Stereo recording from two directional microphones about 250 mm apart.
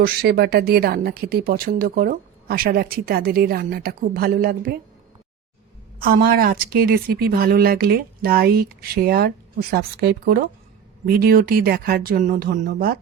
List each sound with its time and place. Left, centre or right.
0.0 s speech: right
6.0 s speech: right